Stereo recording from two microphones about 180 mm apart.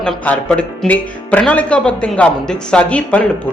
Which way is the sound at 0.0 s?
5° left (ahead or behind).